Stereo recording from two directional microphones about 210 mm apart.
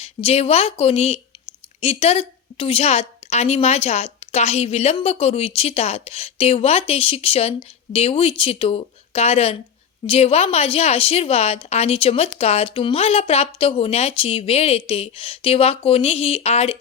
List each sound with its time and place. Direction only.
0.0 s a woman's voice: 30° left (ahead or behind)